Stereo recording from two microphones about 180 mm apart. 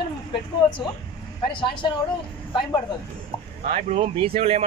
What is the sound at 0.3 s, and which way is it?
Speech, 25° left (ahead or behind).